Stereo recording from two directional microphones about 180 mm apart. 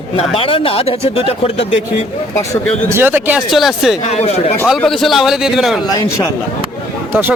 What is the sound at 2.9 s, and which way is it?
A man's voice, 10° right (ahead or behind).